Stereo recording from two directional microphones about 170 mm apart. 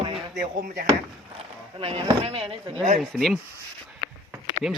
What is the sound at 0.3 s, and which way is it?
Speech, 65° right (ahead or behind).